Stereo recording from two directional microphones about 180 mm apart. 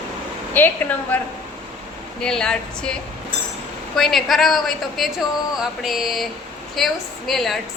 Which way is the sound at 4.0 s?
Centre (ahead or behind).